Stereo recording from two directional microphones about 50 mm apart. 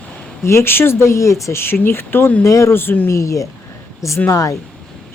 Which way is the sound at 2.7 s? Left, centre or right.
Left.